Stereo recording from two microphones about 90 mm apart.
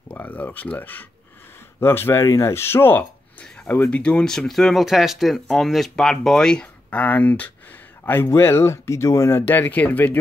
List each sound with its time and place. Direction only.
0.1 s speech: 20° left (ahead or behind)
9.4 s speech: 20° left (ahead or behind)